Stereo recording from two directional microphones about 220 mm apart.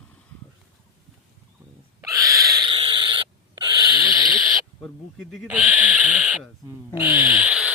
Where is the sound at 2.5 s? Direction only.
20° right (ahead or behind).